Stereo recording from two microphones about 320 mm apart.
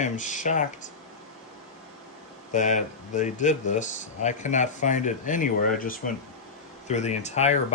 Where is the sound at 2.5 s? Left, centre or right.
Left.